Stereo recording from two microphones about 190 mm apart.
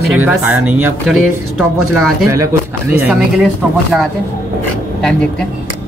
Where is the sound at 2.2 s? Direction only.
15° right (ahead or behind).